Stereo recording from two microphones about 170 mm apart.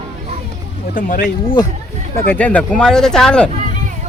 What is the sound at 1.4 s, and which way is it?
Speech, 25° left (ahead or behind).